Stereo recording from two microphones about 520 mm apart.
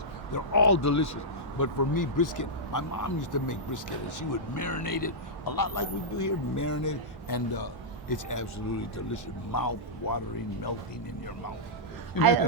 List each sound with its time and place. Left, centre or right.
0.3 s speech: left
12.1 s speech: left